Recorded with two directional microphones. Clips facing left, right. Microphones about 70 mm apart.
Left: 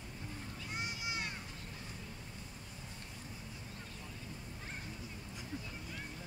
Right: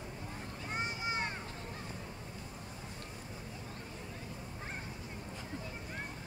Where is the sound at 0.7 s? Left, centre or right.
Right.